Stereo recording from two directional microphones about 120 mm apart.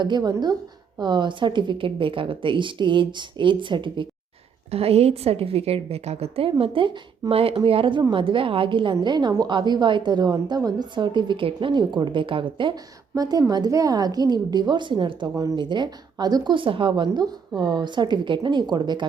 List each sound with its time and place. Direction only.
0.0 s a woman's voice: 35° right (ahead or behind)
4.7 s a woman's voice: 55° right (ahead or behind)
13.1 s a woman's voice: 35° right (ahead or behind)